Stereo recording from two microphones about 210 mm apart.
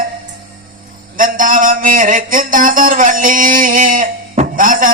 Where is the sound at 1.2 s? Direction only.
40° right (ahead or behind).